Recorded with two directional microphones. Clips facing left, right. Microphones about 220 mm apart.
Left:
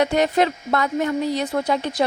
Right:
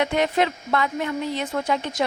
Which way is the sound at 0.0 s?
40° left (ahead or behind).